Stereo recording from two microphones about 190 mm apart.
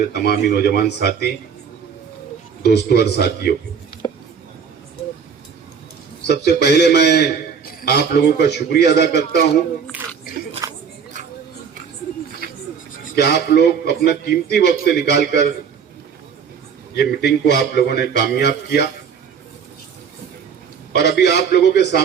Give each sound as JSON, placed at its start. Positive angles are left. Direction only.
{"t": 0.1, "sound": "a man's voice", "side_deg": 60}
{"t": 2.6, "sound": "a man's voice", "side_deg": 60}
{"t": 6.2, "sound": "a man's voice", "side_deg": 60}
{"t": 9.9, "sound": "a sound", "side_deg": -10}
{"t": 10.7, "sound": "a sound", "side_deg": -40}
{"t": 12.4, "sound": "a sound", "side_deg": -50}
{"t": 13.1, "sound": "a man's voice", "side_deg": 60}
{"t": 16.9, "sound": "a man's voice", "side_deg": 55}
{"t": 20.9, "sound": "a man's voice", "side_deg": 60}